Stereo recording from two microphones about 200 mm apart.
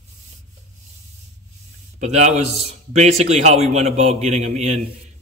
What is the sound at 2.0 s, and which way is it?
Speech, 35° right (ahead or behind).